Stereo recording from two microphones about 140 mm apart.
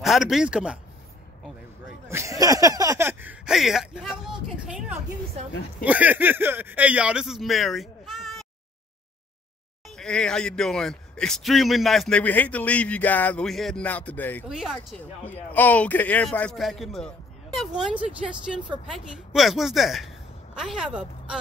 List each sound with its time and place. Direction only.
0.0 s speech: centre (ahead or behind)
2.0 s speech: 20° right (ahead or behind); by 4.0 s 5° right (ahead or behind)
4.1 s a sound: 5° right (ahead or behind)
5.9 s speech: 10° right (ahead or behind)
9.8 s speech: 5° left (ahead or behind)
14.5 s speech: 5° right (ahead or behind)
15.5 s speech: 10° left (ahead or behind); by 21.4 s 5° right (ahead or behind)